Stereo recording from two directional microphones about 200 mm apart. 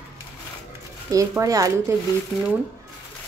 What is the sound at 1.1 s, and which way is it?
Speech, 15° right (ahead or behind).